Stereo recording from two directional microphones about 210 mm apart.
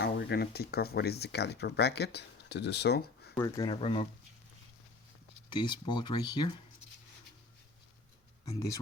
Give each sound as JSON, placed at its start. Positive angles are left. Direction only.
{"t": 0.0, "sound": "speech", "side_deg": 50}
{"t": 3.3, "sound": "speech", "side_deg": 15}
{"t": 5.5, "sound": "speech", "side_deg": 20}